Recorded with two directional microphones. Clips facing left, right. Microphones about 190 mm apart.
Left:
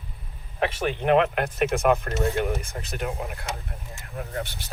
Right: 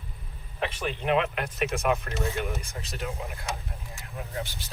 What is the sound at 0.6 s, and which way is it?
Speech, 55° left (ahead or behind).